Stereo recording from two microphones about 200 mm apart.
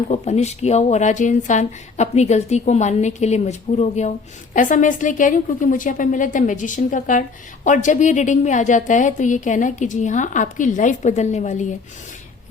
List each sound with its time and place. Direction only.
0.1 s a woman's voice: 35° left (ahead or behind)